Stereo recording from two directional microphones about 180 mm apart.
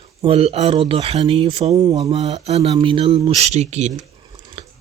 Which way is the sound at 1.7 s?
20° right (ahead or behind).